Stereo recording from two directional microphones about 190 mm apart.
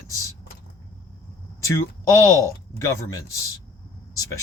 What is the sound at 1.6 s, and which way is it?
Speech, 15° left (ahead or behind).